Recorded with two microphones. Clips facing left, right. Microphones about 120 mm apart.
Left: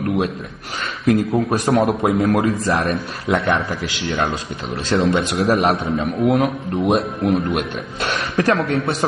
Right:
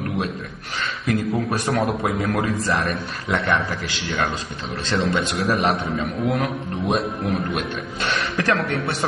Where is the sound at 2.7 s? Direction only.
Centre (ahead or behind).